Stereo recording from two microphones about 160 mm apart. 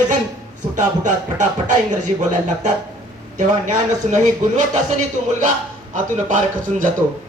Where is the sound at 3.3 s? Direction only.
50° right (ahead or behind).